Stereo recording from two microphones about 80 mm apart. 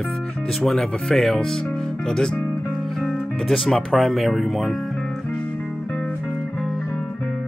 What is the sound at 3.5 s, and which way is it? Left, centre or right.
Speech, centre.